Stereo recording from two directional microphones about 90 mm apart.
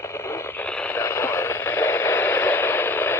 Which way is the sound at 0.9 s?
30° left (ahead or behind).